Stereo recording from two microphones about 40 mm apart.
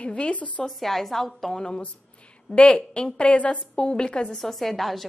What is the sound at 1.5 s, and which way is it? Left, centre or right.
A woman's voice, centre.